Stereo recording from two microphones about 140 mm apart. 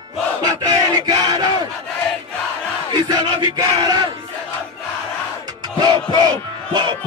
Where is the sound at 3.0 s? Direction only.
30° right (ahead or behind).